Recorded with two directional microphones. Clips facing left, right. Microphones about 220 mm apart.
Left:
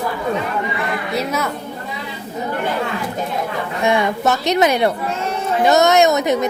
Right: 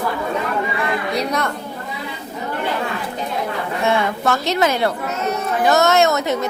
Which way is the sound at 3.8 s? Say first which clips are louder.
Left 3 dB; 15° left (ahead or behind).